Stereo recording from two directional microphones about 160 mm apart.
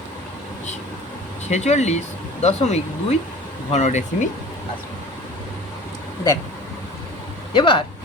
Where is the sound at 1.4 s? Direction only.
45° left (ahead or behind).